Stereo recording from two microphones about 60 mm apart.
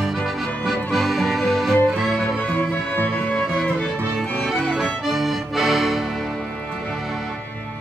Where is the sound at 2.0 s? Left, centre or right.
Centre.